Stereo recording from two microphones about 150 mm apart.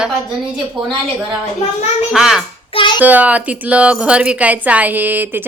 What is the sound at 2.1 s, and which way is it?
Speech, 5° right (ahead or behind).